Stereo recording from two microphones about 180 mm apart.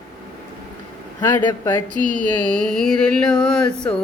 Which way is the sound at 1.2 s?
20° left (ahead or behind).